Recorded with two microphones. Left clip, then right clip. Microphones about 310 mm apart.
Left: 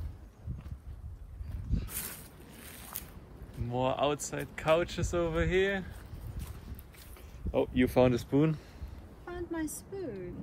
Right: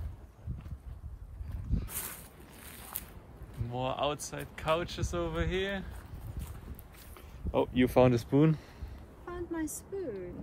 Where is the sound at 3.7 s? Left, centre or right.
Centre.